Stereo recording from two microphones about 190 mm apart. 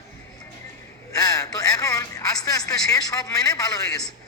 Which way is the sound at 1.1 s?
20° left (ahead or behind).